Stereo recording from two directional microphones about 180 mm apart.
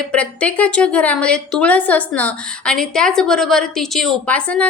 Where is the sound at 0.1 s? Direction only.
5° left (ahead or behind).